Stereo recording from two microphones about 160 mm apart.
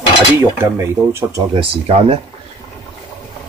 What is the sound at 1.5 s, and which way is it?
Speech, 35° right (ahead or behind).